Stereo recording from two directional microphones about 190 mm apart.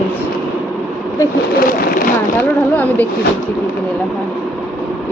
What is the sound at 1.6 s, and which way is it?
Speech, 50° left (ahead or behind).